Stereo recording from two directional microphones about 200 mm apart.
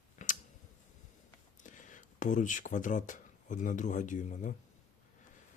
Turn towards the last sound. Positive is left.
turn(degrees=40)  # may be behind; listen again after turning